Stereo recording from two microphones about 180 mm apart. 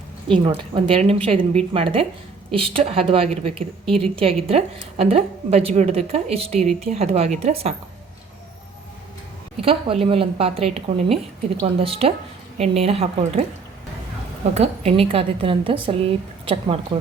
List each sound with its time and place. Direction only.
0.3 s a woman's voice: 30° right (ahead or behind)
6.6 s a woman's voice: centre (ahead or behind)
6.9 s a woman's voice: 35° right (ahead or behind)
9.6 s a woman's voice: 30° right (ahead or behind)
14.5 s a woman's voice: 35° right (ahead or behind)